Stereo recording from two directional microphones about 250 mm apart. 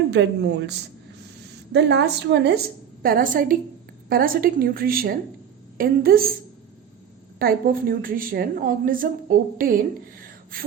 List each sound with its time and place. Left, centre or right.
0.1 s a woman's voice: right
7.3 s a woman's voice: right
10.2 s a sound: right